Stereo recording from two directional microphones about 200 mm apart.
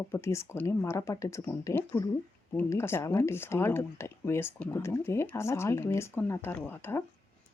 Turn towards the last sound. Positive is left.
turn(degrees=10)  # may be behind; listen again after turning